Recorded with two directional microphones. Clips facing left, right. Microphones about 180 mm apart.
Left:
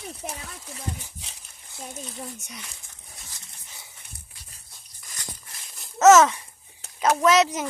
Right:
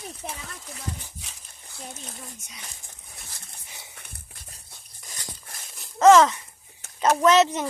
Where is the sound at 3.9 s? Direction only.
60° right (ahead or behind).